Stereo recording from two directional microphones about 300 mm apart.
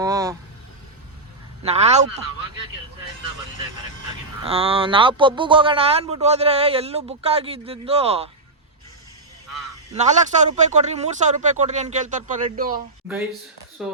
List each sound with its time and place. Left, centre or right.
0.0 s vehicle: centre
1.6 s speech: right
4.4 s speech: centre
9.9 s speech: right
13.8 s speech: centre